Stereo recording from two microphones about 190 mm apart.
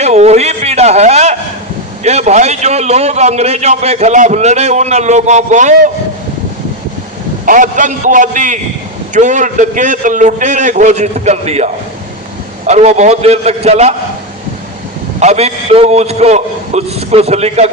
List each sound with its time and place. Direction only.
0.0 s a man's voice: 35° right (ahead or behind)
7.4 s a man's voice: 45° right (ahead or behind)
15.2 s a man's voice: 35° right (ahead or behind)